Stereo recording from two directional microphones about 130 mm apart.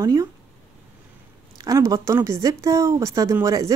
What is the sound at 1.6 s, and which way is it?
Speech, 25° right (ahead or behind).